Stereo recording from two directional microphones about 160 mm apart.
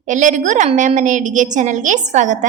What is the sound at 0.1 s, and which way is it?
A woman's voice, 50° right (ahead or behind).